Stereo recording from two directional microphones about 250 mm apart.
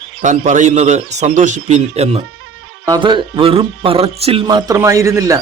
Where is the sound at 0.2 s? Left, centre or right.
Right.